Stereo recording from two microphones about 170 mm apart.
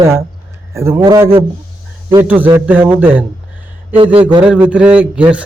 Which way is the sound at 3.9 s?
35° right (ahead or behind).